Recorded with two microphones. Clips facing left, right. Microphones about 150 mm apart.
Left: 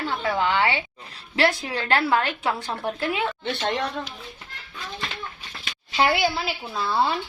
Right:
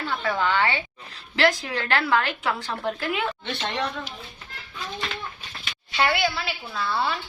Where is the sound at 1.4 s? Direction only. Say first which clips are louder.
Even; 25° left (ahead or behind).